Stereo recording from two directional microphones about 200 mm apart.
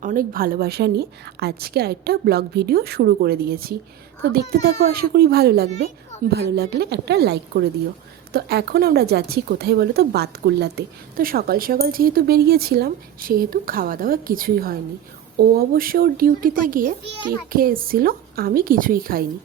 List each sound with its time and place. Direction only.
0.0 s a woman's voice: 45° right (ahead or behind)